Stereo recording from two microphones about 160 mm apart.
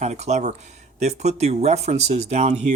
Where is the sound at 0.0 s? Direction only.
45° right (ahead or behind).